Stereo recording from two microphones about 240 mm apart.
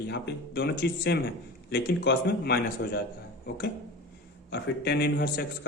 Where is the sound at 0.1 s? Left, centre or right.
Left.